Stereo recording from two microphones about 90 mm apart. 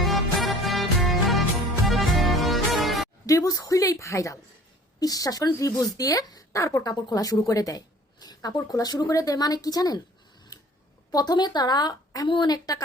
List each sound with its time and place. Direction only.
0.0 s music: centre (ahead or behind)
3.2 s a sound: 40° left (ahead or behind)
3.7 s speech: 40° left (ahead or behind)
11.1 s speech: 50° left (ahead or behind)